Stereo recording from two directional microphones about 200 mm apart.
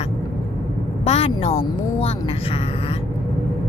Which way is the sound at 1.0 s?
30° left (ahead or behind).